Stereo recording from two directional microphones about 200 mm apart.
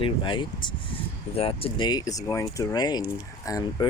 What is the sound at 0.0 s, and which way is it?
Speech, 25° left (ahead or behind).